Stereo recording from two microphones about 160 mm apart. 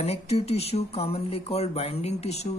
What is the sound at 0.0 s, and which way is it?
Speech, 40° left (ahead or behind).